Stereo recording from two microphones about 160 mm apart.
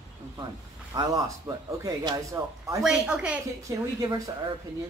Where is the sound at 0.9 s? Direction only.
25° right (ahead or behind).